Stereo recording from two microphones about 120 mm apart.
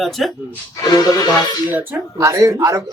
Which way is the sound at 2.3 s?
25° right (ahead or behind).